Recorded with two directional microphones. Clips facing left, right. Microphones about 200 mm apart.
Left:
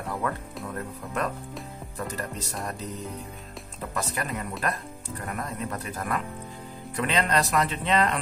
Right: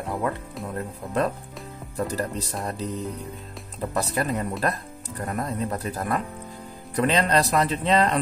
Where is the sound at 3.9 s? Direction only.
35° right (ahead or behind).